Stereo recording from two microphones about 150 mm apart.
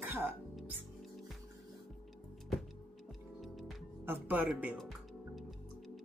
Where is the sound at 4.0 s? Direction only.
15° right (ahead or behind).